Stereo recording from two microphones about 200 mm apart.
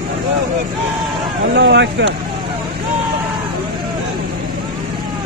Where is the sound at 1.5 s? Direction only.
60° right (ahead or behind).